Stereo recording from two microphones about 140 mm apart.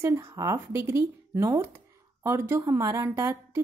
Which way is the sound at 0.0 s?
20° right (ahead or behind).